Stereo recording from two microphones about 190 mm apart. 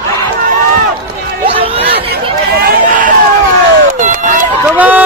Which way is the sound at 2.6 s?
55° right (ahead or behind).